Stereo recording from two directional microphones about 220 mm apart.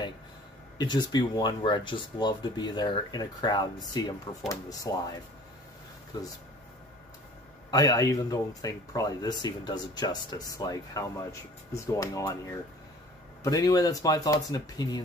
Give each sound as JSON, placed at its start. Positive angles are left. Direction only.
{"t": 0.7, "sound": "speech", "side_deg": 20}
{"t": 6.1, "sound": "speech", "side_deg": 15}
{"t": 7.7, "sound": "speech", "side_deg": 15}